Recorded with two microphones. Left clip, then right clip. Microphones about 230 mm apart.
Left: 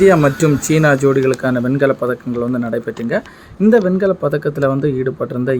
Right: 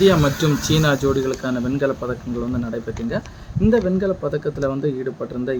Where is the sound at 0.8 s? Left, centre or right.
Left.